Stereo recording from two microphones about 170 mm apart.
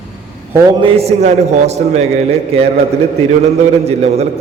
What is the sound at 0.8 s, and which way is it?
A man's voice, 35° right (ahead or behind).